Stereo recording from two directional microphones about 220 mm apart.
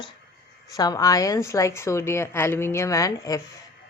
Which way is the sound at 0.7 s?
15° left (ahead or behind).